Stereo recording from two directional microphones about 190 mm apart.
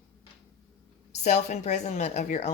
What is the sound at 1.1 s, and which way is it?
Speech, 35° left (ahead or behind).